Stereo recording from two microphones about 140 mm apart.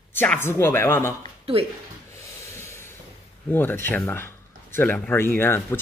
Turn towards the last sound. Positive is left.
turn(degrees=15)  # may be behind; listen again after turning